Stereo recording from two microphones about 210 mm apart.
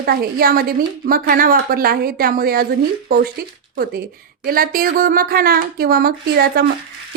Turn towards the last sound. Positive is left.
turn(degrees=-45)  # may be behind; listen again after turning